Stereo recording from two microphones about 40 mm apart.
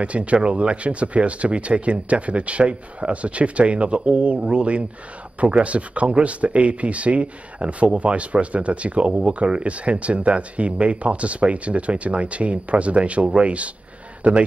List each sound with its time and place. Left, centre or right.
0.0 s speech: right